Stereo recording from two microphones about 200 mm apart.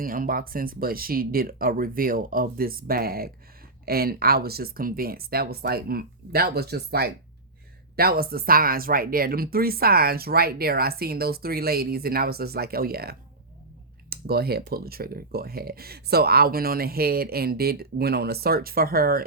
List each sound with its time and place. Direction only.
0.0 s speech: 45° right (ahead or behind)